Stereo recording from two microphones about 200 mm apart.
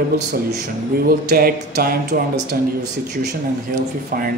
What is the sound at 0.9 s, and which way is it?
A man's voice, 50° right (ahead or behind).